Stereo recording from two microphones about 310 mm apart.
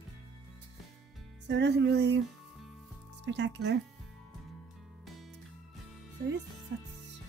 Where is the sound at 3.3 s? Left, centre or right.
Right.